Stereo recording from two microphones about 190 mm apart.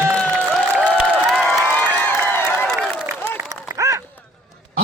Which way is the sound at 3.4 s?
15° right (ahead or behind).